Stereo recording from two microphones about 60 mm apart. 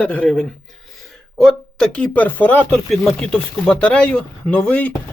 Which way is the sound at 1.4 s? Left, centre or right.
Centre.